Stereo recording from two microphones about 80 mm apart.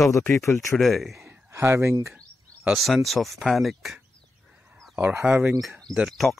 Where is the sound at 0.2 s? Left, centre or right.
Left.